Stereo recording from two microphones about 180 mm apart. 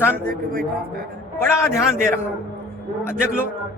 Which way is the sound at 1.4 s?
15° left (ahead or behind).